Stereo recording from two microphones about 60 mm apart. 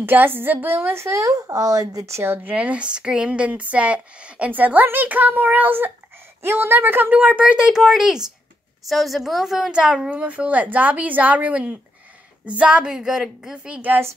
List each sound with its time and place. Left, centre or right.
0.0 s a woman's voice: right
2.3 s a woman's voice: right; by 10.1 s centre
10.1 s a woman's voice: right
13.7 s speech: right